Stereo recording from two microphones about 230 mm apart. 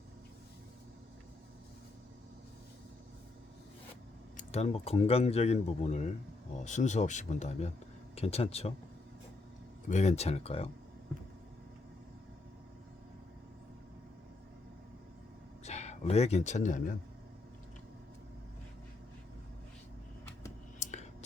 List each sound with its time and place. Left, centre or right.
4.4 s a man's voice: left
9.9 s speech: left
15.6 s speech: left
20.7 s whispering: left